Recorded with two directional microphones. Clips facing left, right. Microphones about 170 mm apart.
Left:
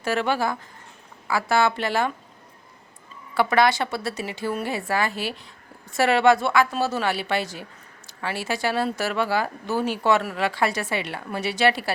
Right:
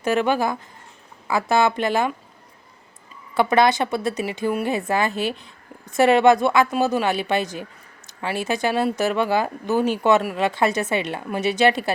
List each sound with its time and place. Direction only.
0.0 s speech: 20° right (ahead or behind)
3.3 s speech: 20° right (ahead or behind)